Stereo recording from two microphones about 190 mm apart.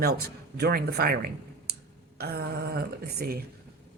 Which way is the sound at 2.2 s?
55° right (ahead or behind).